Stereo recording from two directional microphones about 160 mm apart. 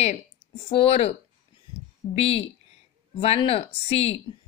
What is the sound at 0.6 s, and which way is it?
Speech, 40° left (ahead or behind).